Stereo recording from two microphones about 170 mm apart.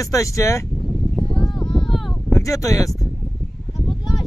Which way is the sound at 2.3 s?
20° left (ahead or behind).